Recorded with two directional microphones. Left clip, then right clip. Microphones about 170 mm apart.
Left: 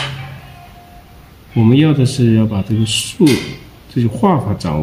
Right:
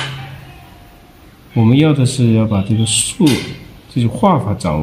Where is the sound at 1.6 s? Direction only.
15° right (ahead or behind).